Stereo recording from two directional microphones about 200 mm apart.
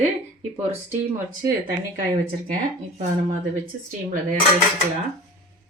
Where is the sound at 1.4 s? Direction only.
15° right (ahead or behind).